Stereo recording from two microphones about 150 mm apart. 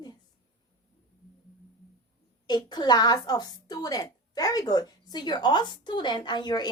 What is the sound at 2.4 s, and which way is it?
A child's voice, 30° left (ahead or behind).